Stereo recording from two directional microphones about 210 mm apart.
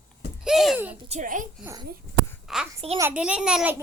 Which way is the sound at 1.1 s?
40° right (ahead or behind).